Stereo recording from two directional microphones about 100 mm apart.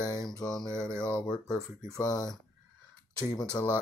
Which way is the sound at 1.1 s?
5° left (ahead or behind).